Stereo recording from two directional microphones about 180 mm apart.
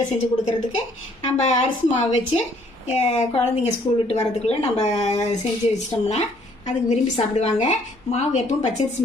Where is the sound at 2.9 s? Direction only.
35° left (ahead or behind).